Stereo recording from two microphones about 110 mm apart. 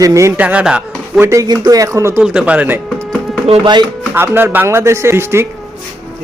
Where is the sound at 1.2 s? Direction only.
30° right (ahead or behind).